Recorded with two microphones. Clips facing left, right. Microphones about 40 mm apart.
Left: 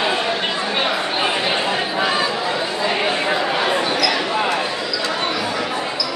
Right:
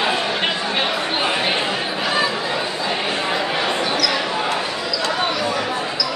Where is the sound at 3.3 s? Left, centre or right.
Centre.